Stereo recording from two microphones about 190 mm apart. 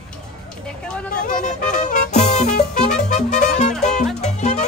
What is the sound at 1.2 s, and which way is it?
Music, 40° left (ahead or behind).